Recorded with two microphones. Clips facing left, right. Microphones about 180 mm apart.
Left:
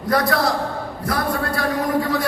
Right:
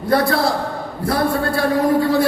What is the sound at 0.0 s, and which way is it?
A man's voice, 30° right (ahead or behind).